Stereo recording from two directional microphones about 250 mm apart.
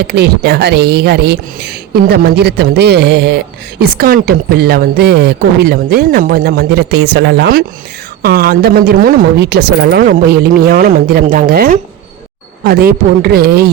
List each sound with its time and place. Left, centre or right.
0.0 s speech: right